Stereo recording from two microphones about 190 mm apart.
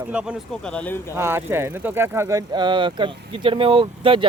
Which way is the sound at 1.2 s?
15° right (ahead or behind).